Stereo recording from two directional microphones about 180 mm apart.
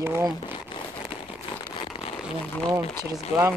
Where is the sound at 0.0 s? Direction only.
15° right (ahead or behind).